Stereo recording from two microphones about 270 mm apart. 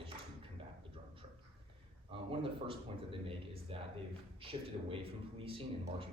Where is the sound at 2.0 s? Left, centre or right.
Centre.